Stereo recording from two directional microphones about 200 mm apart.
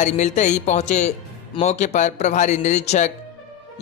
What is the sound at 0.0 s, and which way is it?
A man's voice, 35° left (ahead or behind).